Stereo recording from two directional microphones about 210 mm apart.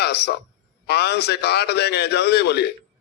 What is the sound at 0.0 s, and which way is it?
A man's voice, 50° left (ahead or behind).